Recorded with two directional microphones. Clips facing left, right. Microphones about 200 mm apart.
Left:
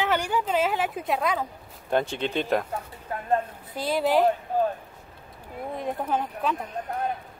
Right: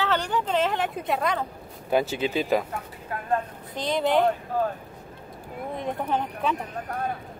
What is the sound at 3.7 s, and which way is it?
Speech, 5° left (ahead or behind).